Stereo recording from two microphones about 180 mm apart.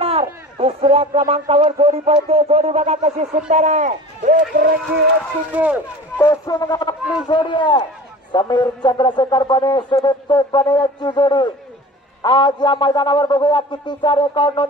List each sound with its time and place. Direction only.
0.0 s speech: 35° right (ahead or behind); by 4.7 s 50° right (ahead or behind)
5.5 s speech: 10° right (ahead or behind)
6.1 s a man's voice: 15° left (ahead or behind)